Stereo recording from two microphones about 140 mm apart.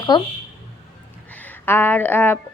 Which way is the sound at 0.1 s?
30° left (ahead or behind).